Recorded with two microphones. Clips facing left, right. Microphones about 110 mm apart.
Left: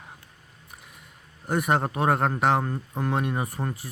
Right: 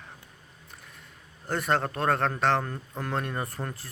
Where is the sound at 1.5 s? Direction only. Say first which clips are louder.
Left 3 dB; 10° left (ahead or behind).